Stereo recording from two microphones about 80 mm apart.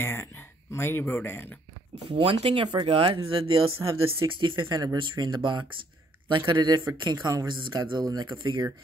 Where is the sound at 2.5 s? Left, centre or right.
Right.